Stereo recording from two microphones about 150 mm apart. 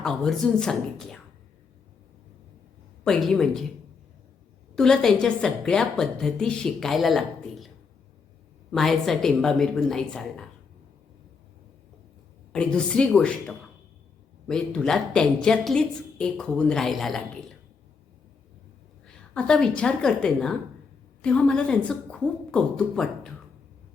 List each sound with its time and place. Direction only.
0.0 s a woman's voice: 5° left (ahead or behind)
3.0 s a woman's voice: 5° left (ahead or behind)
4.7 s a woman's voice: 5° left (ahead or behind)
8.7 s a woman's voice: centre (ahead or behind)
12.5 s a woman's voice: 5° left (ahead or behind)
19.0 s a woman's voice: 5° left (ahead or behind)